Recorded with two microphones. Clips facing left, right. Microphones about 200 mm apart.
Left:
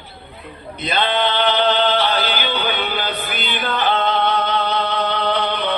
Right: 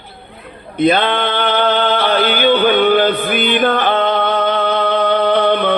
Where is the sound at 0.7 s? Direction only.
55° right (ahead or behind).